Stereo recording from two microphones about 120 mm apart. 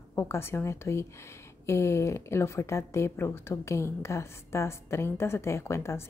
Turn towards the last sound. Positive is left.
turn(degrees=20)  # may be behind; listen again after turning